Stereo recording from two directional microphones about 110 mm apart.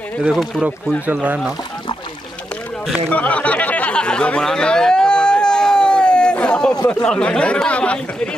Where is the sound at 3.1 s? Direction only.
15° left (ahead or behind).